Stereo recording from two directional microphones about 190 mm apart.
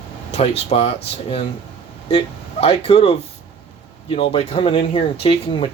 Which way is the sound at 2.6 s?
30° left (ahead or behind).